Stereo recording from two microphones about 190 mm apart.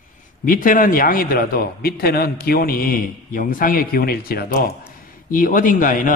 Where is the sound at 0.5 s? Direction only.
45° left (ahead or behind).